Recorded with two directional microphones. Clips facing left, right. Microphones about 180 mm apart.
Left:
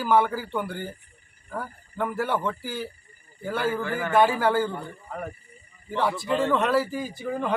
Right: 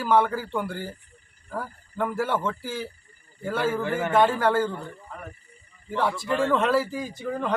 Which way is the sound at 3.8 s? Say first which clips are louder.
Right 2 dB; 25° right (ahead or behind).